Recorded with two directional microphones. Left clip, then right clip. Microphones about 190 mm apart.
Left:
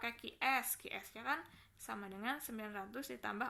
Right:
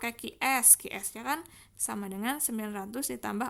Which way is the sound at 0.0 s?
50° right (ahead or behind).